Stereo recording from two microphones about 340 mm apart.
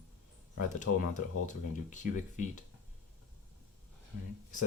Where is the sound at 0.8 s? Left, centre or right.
Left.